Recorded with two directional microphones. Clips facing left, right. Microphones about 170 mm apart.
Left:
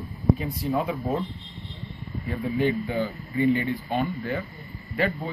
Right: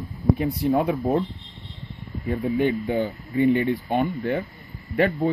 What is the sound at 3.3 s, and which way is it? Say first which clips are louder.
Speech: right 3 dB; 45° right (ahead or behind).